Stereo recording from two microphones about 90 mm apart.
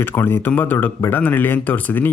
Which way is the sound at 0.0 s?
25° left (ahead or behind).